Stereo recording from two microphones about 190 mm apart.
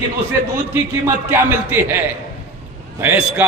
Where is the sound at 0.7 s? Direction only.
10° right (ahead or behind).